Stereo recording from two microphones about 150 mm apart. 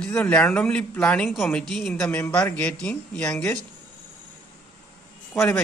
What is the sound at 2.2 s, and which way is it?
Speech, 15° left (ahead or behind).